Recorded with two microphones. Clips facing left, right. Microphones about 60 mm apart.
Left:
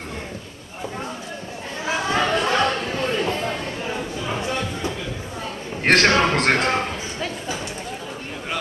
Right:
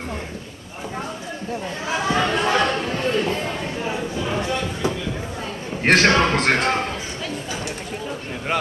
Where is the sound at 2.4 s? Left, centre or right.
Centre.